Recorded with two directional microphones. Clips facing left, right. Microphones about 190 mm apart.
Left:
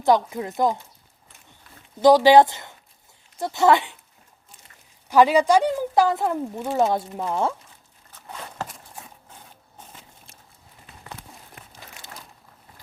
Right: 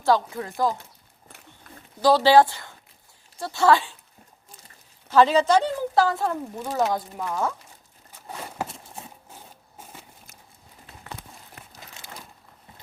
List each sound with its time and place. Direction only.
0.0 s a woman's voice: 20° left (ahead or behind)
2.0 s a woman's voice: 15° left (ahead or behind)
5.0 s speech: 15° left (ahead or behind)
8.6 s horse: 25° right (ahead or behind)
9.3 s a sound: 10° right (ahead or behind)